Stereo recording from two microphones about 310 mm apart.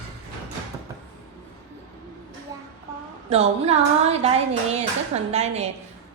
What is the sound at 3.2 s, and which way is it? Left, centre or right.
Speech, centre.